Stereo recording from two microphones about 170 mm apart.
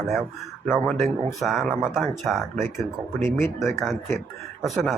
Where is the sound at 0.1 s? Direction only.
Centre (ahead or behind).